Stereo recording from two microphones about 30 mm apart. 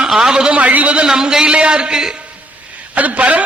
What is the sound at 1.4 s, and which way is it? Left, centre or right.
Speech, right.